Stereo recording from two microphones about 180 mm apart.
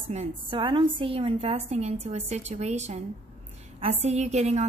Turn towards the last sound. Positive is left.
turn(degrees=-40)  # may be behind; listen again after turning